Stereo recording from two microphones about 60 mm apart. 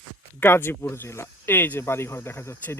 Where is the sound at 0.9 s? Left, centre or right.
Left.